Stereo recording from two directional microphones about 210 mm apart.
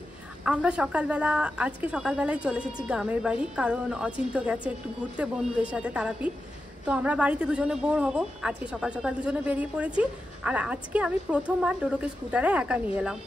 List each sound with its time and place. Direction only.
0.4 s a woman's voice: 5° right (ahead or behind)